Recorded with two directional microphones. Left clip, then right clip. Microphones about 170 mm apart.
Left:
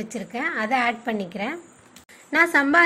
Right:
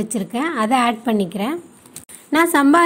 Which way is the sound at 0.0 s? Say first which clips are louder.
Right 5 dB; 35° right (ahead or behind).